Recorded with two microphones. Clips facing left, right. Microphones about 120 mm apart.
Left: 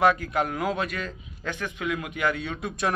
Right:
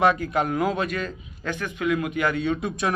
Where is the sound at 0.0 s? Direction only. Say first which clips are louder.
Right 1 dB; 5° left (ahead or behind).